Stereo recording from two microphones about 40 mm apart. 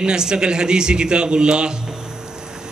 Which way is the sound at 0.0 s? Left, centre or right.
Centre.